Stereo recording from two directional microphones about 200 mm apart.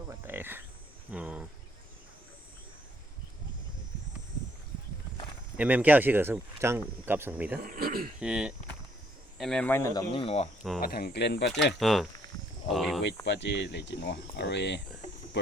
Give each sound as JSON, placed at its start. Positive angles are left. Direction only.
{"t": 0.1, "sound": "cricket", "side_deg": -10}
{"t": 1.1, "sound": "a sound", "side_deg": -5}
{"t": 5.5, "sound": "speech", "side_deg": -10}
{"t": 7.6, "sound": "speech", "side_deg": -45}
{"t": 8.2, "sound": "speech", "side_deg": -5}
{"t": 10.8, "sound": "speech", "side_deg": 50}
{"t": 11.6, "sound": "speech", "side_deg": 0}
{"t": 13.2, "sound": "speech", "side_deg": 60}